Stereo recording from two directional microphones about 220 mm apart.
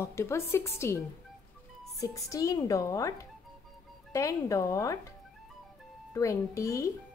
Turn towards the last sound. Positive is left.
turn(degrees=15)  # may be behind; listen again after turning